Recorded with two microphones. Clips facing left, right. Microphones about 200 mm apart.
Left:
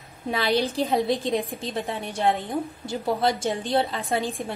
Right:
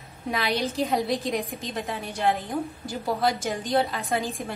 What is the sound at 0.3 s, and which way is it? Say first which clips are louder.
A woman's voice: left 3 dB; 30° left (ahead or behind).